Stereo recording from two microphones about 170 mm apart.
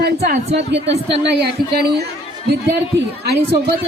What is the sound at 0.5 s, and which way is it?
Speech, 90° right.